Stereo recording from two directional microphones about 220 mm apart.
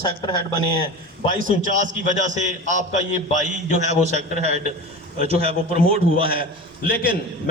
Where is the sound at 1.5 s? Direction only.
35° right (ahead or behind).